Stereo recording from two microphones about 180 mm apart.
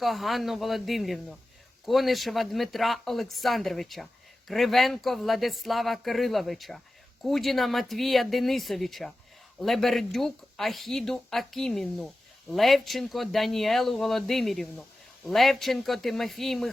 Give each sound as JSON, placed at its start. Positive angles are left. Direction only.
{"t": 0.0, "sound": "speech", "side_deg": 0}